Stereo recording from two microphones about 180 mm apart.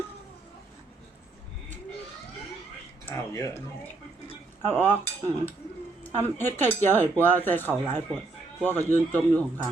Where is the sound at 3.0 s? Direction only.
15° left (ahead or behind).